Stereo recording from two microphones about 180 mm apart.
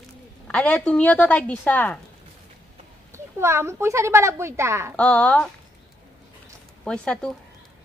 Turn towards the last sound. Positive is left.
turn(degrees=5)  # may be behind; listen again after turning